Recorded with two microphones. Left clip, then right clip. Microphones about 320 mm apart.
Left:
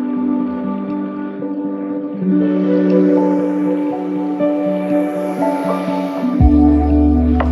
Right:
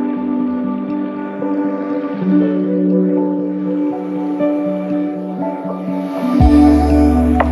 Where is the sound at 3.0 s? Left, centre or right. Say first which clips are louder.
Left 3 dB; left.